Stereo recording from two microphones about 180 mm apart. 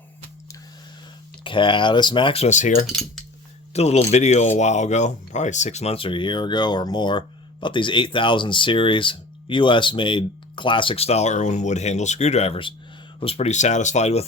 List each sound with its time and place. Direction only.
1.5 s speech: 25° left (ahead or behind); by 2.8 s 45° left (ahead or behind)
2.9 s cutlery: centre (ahead or behind)
3.7 s speech: 35° left (ahead or behind)